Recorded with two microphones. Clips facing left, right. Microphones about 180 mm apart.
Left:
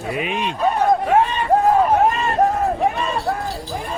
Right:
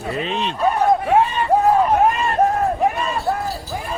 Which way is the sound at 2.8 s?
Centre (ahead or behind).